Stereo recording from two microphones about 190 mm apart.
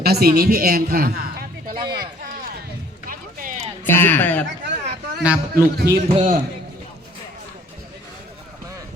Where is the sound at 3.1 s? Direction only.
45° right (ahead or behind).